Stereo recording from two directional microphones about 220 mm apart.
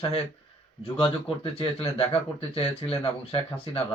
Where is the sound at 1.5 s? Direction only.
25° left (ahead or behind).